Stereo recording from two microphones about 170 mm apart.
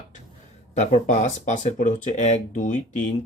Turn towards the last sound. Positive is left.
turn(degrees=45)  # may be behind; listen again after turning